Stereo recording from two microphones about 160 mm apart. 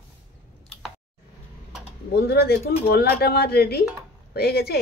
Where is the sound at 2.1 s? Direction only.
90° left.